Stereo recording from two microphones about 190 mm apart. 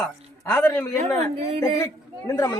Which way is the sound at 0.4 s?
10° left (ahead or behind).